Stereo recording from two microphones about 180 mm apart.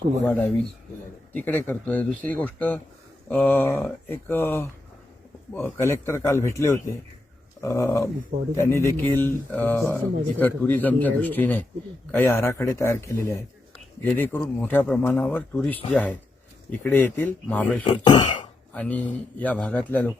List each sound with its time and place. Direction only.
0.3 s speech: 10° left (ahead or behind)
17.8 s speech: 25° left (ahead or behind)
18.7 s speech: 5° left (ahead or behind)